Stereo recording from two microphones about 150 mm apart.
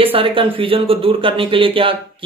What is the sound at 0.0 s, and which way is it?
Speech, 35° right (ahead or behind).